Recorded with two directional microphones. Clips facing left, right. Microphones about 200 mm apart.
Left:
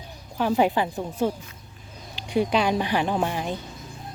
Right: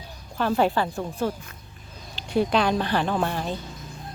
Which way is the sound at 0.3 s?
15° left (ahead or behind).